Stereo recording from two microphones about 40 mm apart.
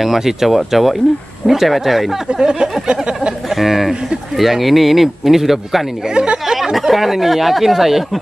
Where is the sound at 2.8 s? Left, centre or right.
Right.